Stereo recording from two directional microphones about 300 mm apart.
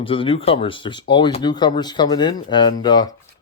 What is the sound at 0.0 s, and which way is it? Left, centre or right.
Speech, centre.